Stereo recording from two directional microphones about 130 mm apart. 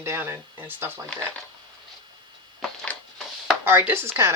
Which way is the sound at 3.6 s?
15° right (ahead or behind).